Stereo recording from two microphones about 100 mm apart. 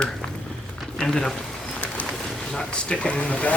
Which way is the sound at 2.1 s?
Centre (ahead or behind).